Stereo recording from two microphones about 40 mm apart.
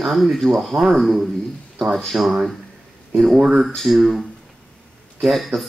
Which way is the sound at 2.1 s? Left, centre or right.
Right.